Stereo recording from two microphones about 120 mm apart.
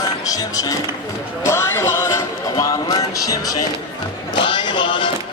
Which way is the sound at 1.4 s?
20° left (ahead or behind).